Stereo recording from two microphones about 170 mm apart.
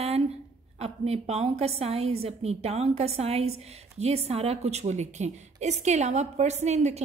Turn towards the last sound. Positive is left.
turn(degrees=-40)  # may be behind; listen again after turning